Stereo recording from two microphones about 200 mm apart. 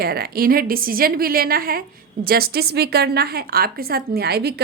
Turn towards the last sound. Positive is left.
turn(degrees=-55)  # may be behind; listen again after turning